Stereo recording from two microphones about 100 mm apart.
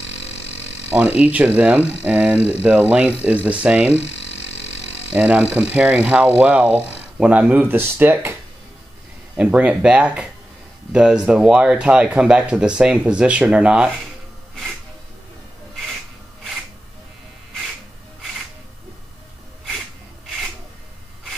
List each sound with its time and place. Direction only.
1.2 s speech: 15° right (ahead or behind)
5.1 s speech: 15° right (ahead or behind)
9.4 s speech: 15° right (ahead or behind)